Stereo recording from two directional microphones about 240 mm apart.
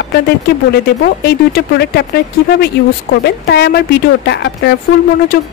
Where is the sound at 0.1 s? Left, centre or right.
Left.